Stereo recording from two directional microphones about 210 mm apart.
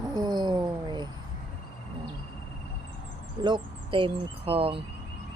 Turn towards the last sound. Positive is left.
turn(degrees=-25)  # may be behind; listen again after turning